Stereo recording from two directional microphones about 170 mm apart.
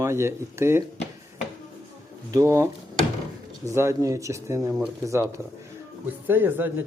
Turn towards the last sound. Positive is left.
turn(degrees=-10)  # may be behind; listen again after turning